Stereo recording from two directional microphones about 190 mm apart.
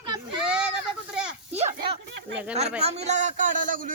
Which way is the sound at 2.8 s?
35° right (ahead or behind).